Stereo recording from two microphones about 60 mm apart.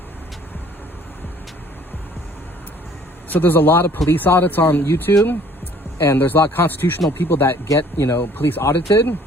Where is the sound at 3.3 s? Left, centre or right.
Left.